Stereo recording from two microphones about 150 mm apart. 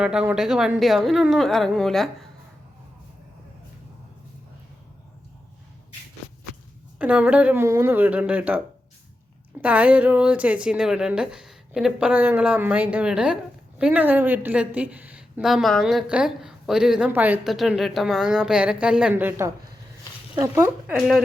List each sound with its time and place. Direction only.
0.0 s speech: 5° right (ahead or behind)
7.0 s a woman's voice: 10° right (ahead or behind)
17.5 s a woman's voice: centre (ahead or behind); by 20.9 s 15° right (ahead or behind)